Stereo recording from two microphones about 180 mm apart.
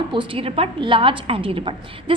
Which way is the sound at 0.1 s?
30° right (ahead or behind).